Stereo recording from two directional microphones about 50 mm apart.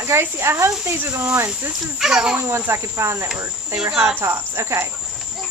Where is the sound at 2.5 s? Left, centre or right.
Right.